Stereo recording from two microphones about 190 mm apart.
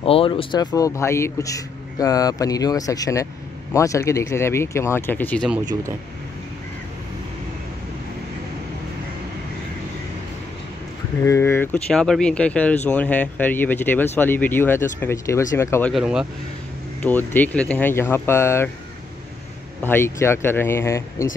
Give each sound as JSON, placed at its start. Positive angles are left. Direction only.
{"t": 0.0, "sound": "a man's voice", "side_deg": 30}
{"t": 11.2, "sound": "speech", "side_deg": 15}
{"t": 15.9, "sound": "speech", "side_deg": -5}
{"t": 17.0, "sound": "speech", "side_deg": 10}
{"t": 19.8, "sound": "speech", "side_deg": 10}